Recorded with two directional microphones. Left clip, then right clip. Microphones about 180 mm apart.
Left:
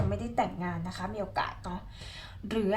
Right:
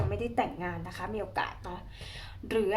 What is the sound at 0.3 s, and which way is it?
Speech, 30° right (ahead or behind).